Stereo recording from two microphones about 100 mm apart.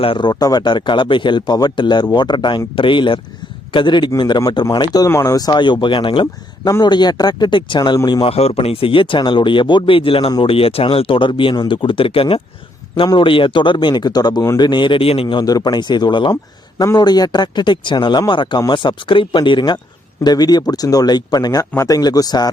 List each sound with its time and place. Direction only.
0.0 s a man's voice: 55° left (ahead or behind)
4.4 s a man's voice: 35° left (ahead or behind)
4.9 s speech: 30° left (ahead or behind)
5.5 s a man's voice: 50° left (ahead or behind)
6.8 s a man's voice: 45° left (ahead or behind)
8.2 s speech: 85° left
10.9 s a man's voice: 60° left (ahead or behind); by 14.6 s 40° left (ahead or behind)
14.6 s speech: 50° left (ahead or behind); by 15.4 s 75° left (ahead or behind)
15.4 s a man's voice: 40° left (ahead or behind)